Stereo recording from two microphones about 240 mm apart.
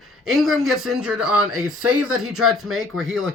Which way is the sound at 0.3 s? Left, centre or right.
Centre.